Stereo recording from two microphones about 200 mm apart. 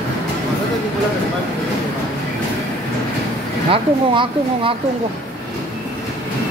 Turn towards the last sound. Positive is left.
turn(degrees=-25)  # may be behind; listen again after turning